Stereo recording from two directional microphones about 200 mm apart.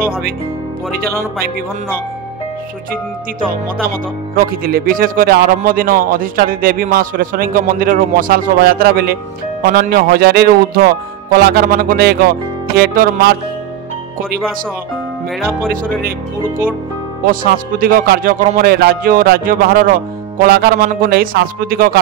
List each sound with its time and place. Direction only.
4.4 s speech: 45° right (ahead or behind)
17.3 s speech: 45° right (ahead or behind)